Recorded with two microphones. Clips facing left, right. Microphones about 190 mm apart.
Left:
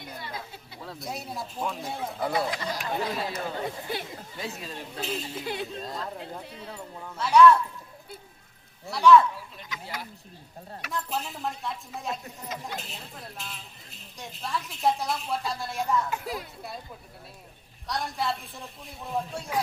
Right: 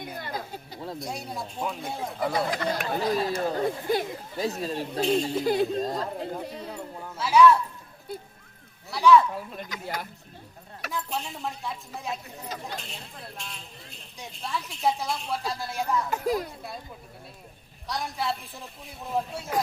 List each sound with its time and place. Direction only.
0.0 s a sound: 45° right (ahead or behind)
0.9 s speech: centre (ahead or behind)
2.6 s speech: 55° right (ahead or behind)
3.2 s speech: 40° right (ahead or behind)
6.7 s speech: 5° right (ahead or behind)
8.9 s speech: centre (ahead or behind)
9.3 s speech: 50° right (ahead or behind)
10.9 s speech: centre (ahead or behind)
16.0 s speech: 40° right (ahead or behind)
17.8 s speech: centre (ahead or behind)